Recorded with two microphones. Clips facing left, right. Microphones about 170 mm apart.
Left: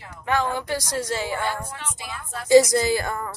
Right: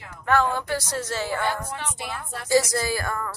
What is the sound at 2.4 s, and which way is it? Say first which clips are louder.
Speech: left 6 dB; 20° left (ahead or behind).